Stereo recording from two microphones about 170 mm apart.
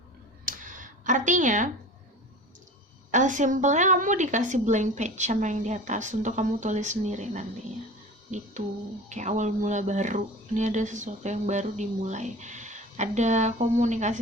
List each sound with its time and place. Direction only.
0.4 s a sound: 50° right (ahead or behind)
3.1 s speech: 45° right (ahead or behind)
9.0 s speech: 45° right (ahead or behind)